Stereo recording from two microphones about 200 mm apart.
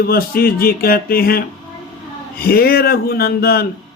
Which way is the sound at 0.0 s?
50° left (ahead or behind).